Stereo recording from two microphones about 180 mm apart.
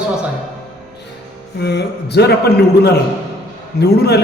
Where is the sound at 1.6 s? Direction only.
70° left (ahead or behind).